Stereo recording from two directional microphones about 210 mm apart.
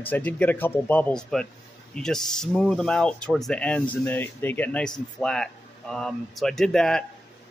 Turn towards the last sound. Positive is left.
turn(degrees=0)  # may be behind; listen again after turning